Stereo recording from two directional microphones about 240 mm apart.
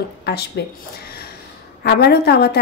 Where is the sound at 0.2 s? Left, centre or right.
Left.